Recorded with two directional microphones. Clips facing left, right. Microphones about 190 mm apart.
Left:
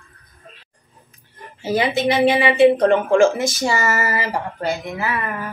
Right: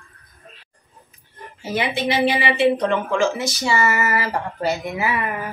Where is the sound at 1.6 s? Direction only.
35° left (ahead or behind).